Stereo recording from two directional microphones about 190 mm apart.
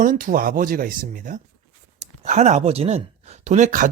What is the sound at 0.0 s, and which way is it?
Speech, 45° right (ahead or behind).